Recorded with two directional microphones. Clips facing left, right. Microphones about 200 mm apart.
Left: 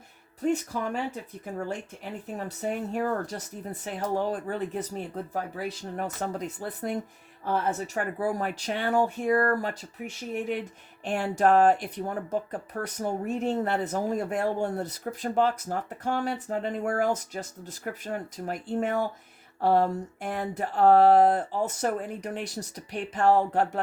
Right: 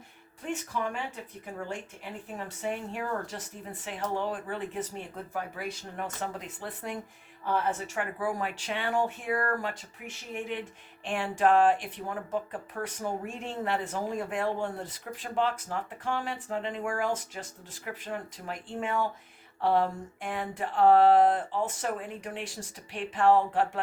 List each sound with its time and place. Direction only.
0.4 s speech: 40° left (ahead or behind)
2.4 s speech: 40° left (ahead or behind)
11.0 s speech: 40° left (ahead or behind)